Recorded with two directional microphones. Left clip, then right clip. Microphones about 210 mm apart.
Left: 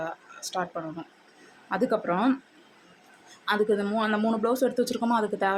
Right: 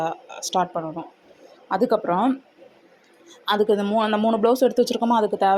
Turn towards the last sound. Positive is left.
turn(degrees=-20)  # may be behind; listen again after turning